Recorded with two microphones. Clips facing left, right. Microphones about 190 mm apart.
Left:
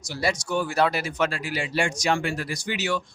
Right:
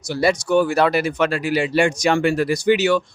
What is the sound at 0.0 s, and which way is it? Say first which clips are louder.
Speech: right 8 dB; 60° right (ahead or behind).